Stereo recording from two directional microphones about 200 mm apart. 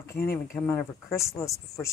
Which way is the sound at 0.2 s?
50° left (ahead or behind).